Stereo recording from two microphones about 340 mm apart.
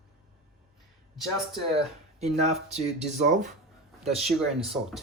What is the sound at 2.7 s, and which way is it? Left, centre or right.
Speech, centre.